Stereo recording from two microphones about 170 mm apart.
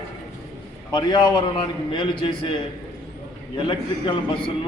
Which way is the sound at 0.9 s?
25° left (ahead or behind).